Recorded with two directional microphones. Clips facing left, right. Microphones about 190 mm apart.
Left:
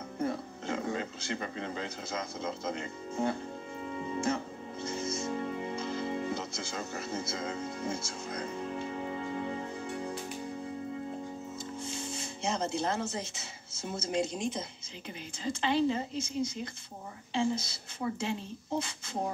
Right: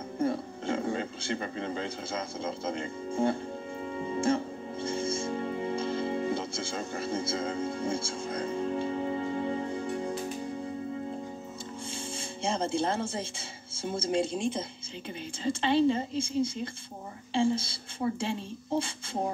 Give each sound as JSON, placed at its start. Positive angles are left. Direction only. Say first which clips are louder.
{"t": 0.2, "sound": "speech", "louder": "right 4 dB", "side_deg": -30}
{"t": 4.2, "sound": "music", "louder": "right 6 dB", "side_deg": -30}
{"t": 11.9, "sound": "speech", "louder": "right 1 dB", "side_deg": -30}